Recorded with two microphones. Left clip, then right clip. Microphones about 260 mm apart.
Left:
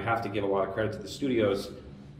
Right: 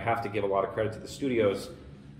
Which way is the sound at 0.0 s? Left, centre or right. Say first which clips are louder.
Even; centre.